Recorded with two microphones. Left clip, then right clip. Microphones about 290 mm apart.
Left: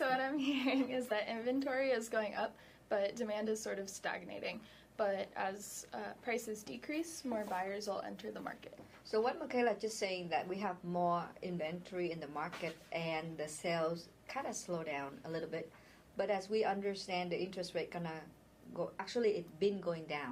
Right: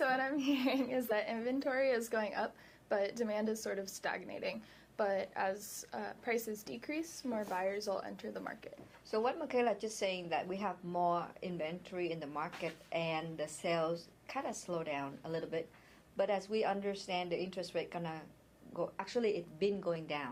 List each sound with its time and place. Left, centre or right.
0.0 s a woman's voice: right